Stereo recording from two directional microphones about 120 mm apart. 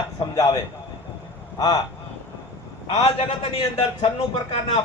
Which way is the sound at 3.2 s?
55° left (ahead or behind).